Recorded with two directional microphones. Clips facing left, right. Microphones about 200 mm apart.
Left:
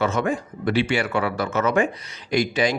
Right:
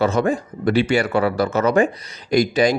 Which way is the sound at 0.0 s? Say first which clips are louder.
Right 4 dB; 35° right (ahead or behind).